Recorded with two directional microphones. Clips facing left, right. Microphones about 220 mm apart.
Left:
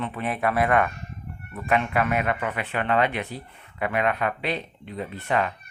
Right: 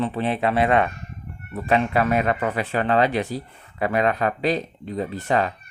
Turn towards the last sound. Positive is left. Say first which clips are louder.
# right 3 dB
turn(degrees=-35)  # may be behind; listen again after turning